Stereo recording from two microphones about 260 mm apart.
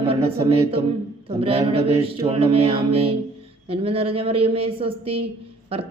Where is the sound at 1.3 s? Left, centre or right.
Right.